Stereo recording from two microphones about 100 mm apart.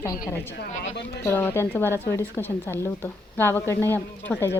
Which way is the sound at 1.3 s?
20° left (ahead or behind).